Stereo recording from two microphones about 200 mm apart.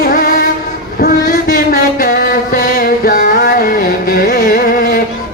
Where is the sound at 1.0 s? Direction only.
45° left (ahead or behind).